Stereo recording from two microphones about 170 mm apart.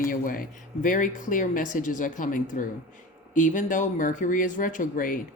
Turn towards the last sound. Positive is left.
turn(degrees=55)  # may be behind; listen again after turning